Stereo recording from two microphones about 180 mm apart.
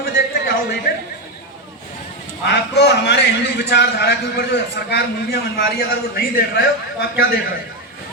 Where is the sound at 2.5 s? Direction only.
70° left (ahead or behind).